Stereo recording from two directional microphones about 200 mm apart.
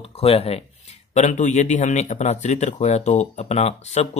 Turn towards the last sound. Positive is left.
turn(degrees=35)  # may be behind; listen again after turning